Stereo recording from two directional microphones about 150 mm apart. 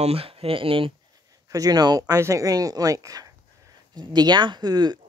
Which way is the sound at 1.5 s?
25° right (ahead or behind).